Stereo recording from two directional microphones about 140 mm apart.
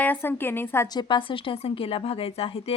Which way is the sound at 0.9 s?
30° left (ahead or behind).